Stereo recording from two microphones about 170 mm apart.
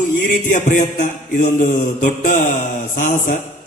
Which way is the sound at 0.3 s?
50° left (ahead or behind).